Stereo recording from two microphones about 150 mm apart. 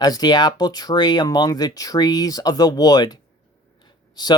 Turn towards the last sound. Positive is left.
turn(degrees=25)  # may be behind; listen again after turning